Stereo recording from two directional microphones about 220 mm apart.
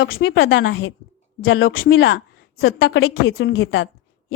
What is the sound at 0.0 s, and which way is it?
A woman's voice, 60° left (ahead or behind).